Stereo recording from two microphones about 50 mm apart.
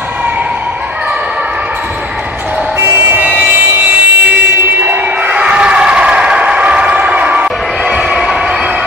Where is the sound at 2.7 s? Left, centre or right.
Right.